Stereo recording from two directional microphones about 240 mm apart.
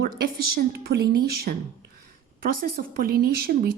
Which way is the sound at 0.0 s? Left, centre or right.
Right.